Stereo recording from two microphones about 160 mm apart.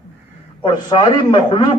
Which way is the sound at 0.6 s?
30° left (ahead or behind).